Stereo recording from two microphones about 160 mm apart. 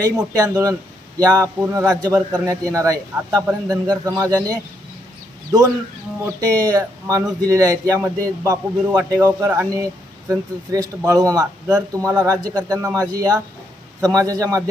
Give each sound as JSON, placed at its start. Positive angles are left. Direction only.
{"t": 0.0, "sound": "speech", "side_deg": -20}
{"t": 6.4, "sound": "speech", "side_deg": -20}